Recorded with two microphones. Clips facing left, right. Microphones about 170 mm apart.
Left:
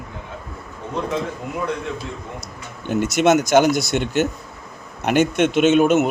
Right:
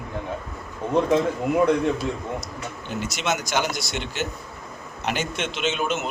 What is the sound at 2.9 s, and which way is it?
A man's voice, 55° left (ahead or behind).